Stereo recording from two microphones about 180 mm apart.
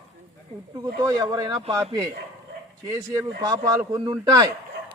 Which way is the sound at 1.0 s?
20° right (ahead or behind).